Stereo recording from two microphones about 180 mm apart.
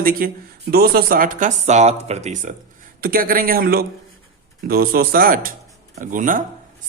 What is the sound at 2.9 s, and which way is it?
Speech, 55° right (ahead or behind).